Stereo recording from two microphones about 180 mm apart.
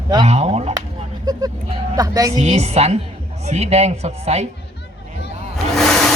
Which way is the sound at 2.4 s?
40° right (ahead or behind).